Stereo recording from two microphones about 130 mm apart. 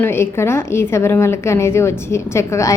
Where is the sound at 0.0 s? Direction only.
20° left (ahead or behind).